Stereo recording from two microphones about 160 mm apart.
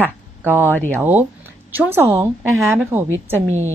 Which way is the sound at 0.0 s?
15° right (ahead or behind).